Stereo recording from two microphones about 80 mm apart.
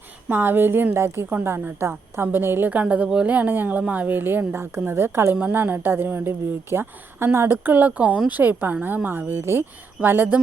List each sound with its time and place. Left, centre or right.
0.3 s a woman's voice: right